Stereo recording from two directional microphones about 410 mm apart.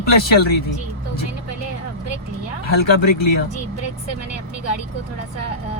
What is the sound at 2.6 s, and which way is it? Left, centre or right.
Speech, left.